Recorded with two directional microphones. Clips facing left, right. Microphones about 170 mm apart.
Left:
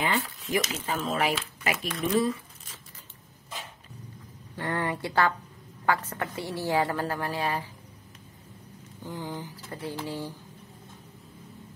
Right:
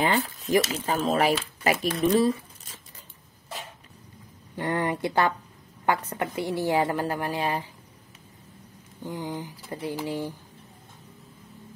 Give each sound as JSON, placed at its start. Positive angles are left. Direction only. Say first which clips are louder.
{"t": 0.0, "sound": "speech", "louder": "right 4 dB", "side_deg": -35}
{"t": 4.6, "sound": "a woman's voice", "louder": "right 3 dB", "side_deg": -20}
{"t": 9.0, "sound": "mantra", "louder": "right 3 dB", "side_deg": -15}